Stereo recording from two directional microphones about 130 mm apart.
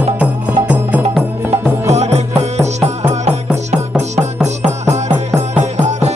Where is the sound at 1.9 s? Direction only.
55° right (ahead or behind).